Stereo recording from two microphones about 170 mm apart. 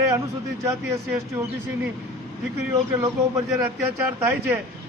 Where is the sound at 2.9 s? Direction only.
20° right (ahead or behind).